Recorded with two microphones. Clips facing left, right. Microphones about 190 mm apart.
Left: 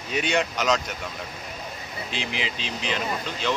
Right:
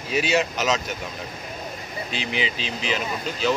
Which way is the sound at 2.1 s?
Centre (ahead or behind).